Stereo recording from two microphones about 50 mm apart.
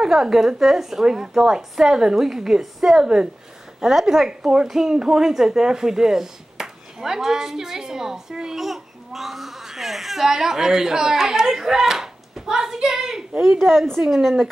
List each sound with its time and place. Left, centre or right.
0.0 s a woman's voice: centre